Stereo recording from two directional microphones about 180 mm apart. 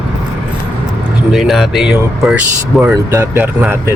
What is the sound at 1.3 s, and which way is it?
Speech, centre (ahead or behind).